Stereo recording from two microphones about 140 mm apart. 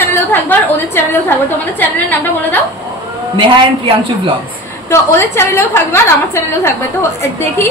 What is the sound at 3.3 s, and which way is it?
Speech, 35° right (ahead or behind).